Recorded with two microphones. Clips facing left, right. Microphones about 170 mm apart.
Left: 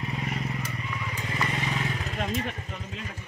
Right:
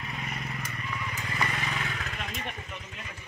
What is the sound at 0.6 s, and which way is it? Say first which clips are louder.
Vehicle: left 2 dB; 10° left (ahead or behind).